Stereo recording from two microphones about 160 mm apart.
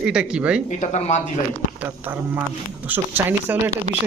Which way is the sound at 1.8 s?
10° right (ahead or behind).